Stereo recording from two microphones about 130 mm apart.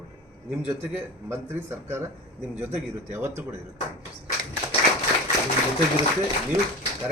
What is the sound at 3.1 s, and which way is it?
Speech, 20° right (ahead or behind).